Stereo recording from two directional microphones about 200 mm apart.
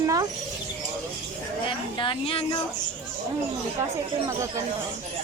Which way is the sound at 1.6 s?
25° left (ahead or behind).